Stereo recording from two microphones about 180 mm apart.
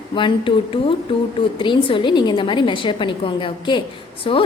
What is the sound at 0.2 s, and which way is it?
A woman's voice, 25° left (ahead or behind).